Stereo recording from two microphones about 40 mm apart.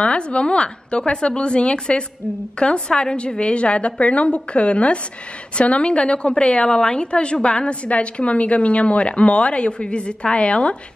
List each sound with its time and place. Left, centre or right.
0.0 s a woman's voice: left